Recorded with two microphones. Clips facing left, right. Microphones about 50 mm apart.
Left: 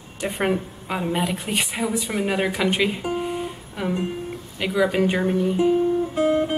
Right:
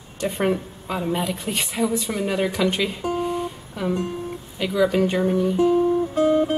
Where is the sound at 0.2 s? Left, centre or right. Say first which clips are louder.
Right 1 dB; centre.